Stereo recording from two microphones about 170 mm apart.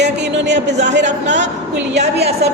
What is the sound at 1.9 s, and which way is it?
Speech, 75° right (ahead or behind).